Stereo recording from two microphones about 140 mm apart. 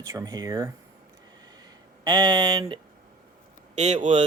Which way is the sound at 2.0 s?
30° right (ahead or behind).